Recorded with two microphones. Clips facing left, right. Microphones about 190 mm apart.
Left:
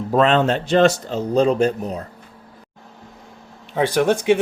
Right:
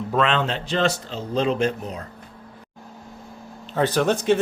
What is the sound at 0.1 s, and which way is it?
A man's voice, 40° left (ahead or behind).